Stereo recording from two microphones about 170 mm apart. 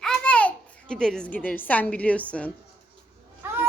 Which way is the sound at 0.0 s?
5° left (ahead or behind).